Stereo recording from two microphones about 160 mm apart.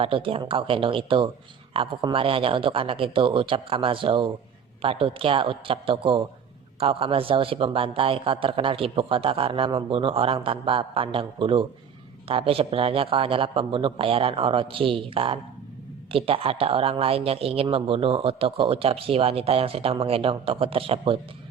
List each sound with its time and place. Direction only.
0.0 s speech: 35° right (ahead or behind)